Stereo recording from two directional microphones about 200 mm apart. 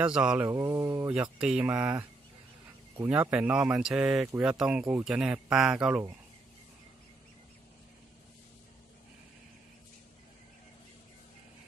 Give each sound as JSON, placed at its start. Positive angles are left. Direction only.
{"t": 0.0, "sound": "speech", "side_deg": -5}